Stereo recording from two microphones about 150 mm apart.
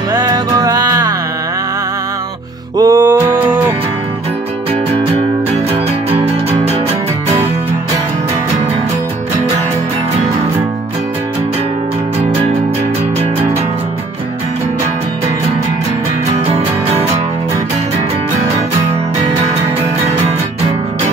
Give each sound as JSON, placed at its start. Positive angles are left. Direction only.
{"t": 0.1, "sound": "music", "side_deg": -25}
{"t": 2.8, "sound": "music", "side_deg": -20}
{"t": 5.7, "sound": "music", "side_deg": -45}